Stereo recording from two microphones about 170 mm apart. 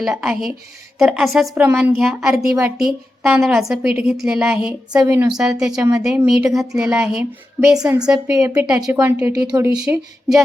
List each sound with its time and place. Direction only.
0.0 s a woman's voice: 5° right (ahead or behind)
4.9 s a woman's voice: 15° right (ahead or behind)
5.3 s a woman's voice: 5° right (ahead or behind)
7.8 s a woman's voice: 20° right (ahead or behind)
9.7 s a woman's voice: 5° right (ahead or behind)